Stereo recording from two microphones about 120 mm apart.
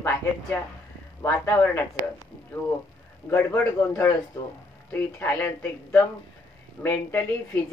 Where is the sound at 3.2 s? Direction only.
20° left (ahead or behind).